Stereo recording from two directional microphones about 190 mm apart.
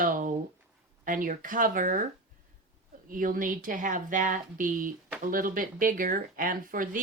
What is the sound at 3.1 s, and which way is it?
Speech, 45° right (ahead or behind).